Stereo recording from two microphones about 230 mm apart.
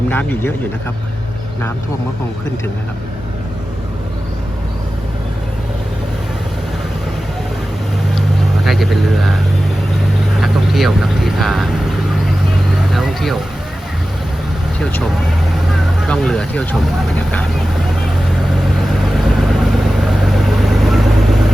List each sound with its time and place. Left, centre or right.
0.1 s speech: centre
8.1 s vehicle: centre
10.3 s speech: centre
12.7 s vehicle: centre
14.8 s speech: centre
18.8 s vehicle: centre